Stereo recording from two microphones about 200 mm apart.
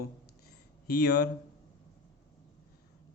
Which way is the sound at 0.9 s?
50° left (ahead or behind).